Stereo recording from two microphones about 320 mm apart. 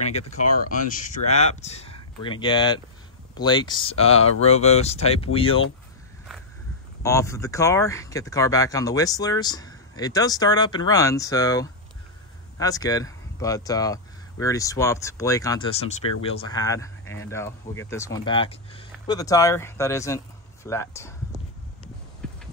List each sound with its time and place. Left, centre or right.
0.4 s speech: left
1.3 s speech: left
7.0 s speech: centre
22.2 s clip-clop: centre